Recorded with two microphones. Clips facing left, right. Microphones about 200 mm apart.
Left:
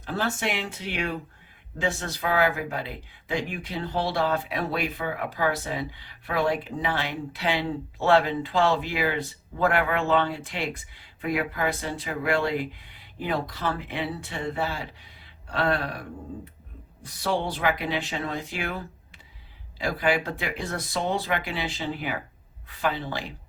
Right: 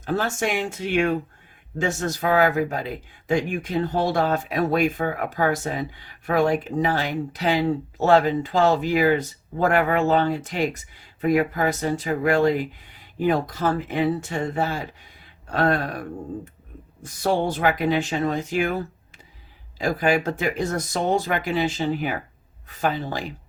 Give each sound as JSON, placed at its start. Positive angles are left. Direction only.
{"t": 0.0, "sound": "speech", "side_deg": -45}